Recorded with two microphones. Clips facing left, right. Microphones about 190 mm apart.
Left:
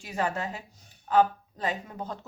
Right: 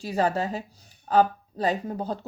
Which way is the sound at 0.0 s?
35° right (ahead or behind).